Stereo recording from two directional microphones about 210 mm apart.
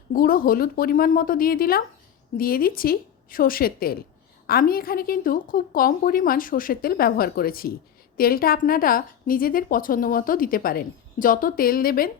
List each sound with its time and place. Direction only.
0.1 s a woman's voice: 45° left (ahead or behind)